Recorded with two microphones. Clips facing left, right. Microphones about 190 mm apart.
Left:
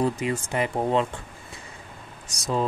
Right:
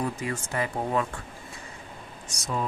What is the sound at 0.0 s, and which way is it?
Speech, 20° left (ahead or behind).